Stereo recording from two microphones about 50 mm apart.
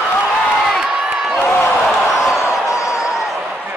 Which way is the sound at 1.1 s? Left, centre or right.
Centre.